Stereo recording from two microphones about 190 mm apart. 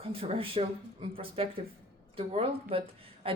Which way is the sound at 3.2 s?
30° right (ahead or behind).